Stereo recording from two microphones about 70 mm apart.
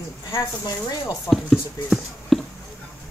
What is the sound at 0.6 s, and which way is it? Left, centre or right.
Speech, left.